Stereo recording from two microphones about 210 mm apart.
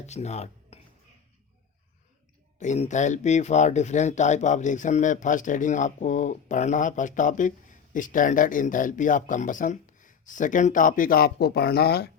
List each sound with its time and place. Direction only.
0.0 s speech: 30° left (ahead or behind)
2.6 s speech: 35° left (ahead or behind); by 12.1 s 50° left (ahead or behind)